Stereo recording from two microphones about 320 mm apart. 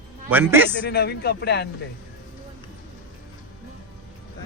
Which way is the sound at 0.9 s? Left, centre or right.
Left.